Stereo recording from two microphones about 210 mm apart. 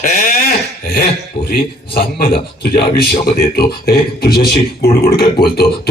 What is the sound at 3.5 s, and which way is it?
Speech, 45° left (ahead or behind).